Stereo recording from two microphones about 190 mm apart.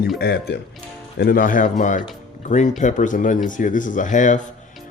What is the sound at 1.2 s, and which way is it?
A man's voice, 50° left (ahead or behind).